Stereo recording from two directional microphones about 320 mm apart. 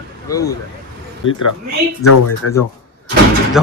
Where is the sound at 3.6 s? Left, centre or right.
Centre.